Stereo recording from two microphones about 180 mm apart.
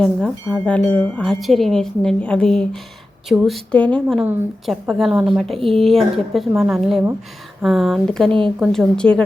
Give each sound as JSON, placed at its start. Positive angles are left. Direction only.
{"t": 0.0, "sound": "speech", "side_deg": 5}
{"t": 4.2, "sound": "a woman's voice", "side_deg": -5}